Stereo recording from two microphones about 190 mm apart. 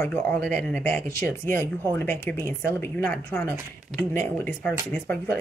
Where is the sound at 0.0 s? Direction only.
10° left (ahead or behind).